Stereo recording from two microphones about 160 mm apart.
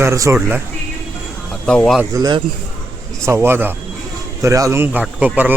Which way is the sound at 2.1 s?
25° right (ahead or behind).